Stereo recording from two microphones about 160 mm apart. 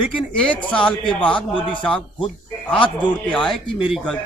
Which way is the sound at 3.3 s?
5° left (ahead or behind).